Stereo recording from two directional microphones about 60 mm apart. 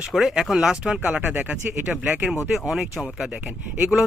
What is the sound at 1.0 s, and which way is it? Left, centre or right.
Speech, right.